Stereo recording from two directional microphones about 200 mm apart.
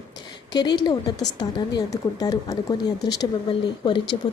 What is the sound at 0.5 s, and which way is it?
A woman's voice, 20° left (ahead or behind).